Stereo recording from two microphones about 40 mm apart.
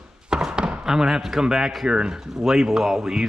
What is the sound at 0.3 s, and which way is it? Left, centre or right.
Thunk, centre.